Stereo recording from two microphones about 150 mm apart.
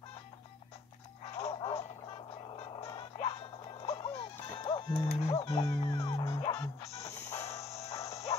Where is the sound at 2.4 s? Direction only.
35° left (ahead or behind).